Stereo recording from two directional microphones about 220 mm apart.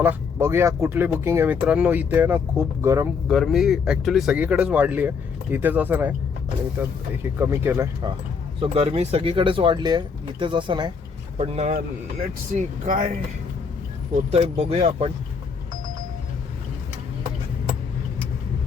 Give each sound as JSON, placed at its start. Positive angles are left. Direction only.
{"t": 0.0, "sound": "speech", "side_deg": -10}
{"t": 3.2, "sound": "speech", "side_deg": 0}
{"t": 8.6, "sound": "speech", "side_deg": -25}
{"t": 14.3, "sound": "speech", "side_deg": -30}